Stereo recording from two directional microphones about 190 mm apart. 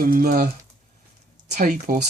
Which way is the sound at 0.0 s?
45° right (ahead or behind).